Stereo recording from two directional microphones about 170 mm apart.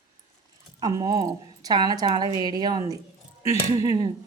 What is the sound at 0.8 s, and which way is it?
A woman's voice, 20° right (ahead or behind).